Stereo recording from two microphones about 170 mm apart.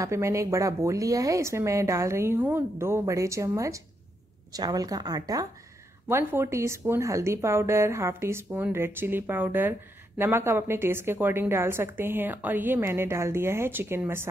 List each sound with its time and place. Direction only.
0.0 s a woman's voice: 15° right (ahead or behind)